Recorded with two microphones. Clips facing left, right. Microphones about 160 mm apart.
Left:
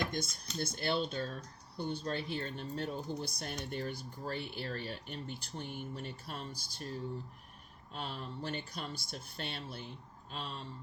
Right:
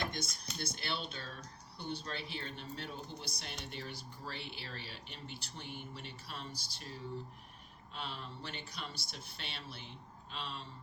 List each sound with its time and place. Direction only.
0.6 s speech: 45° left (ahead or behind)